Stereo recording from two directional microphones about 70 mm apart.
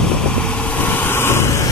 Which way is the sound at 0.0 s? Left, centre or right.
Centre.